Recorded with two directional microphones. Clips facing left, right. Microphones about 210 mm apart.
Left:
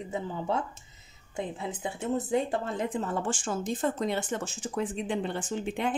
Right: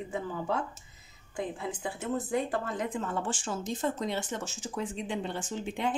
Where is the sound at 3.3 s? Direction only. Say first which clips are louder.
Left 3 dB; 50° left (ahead or behind).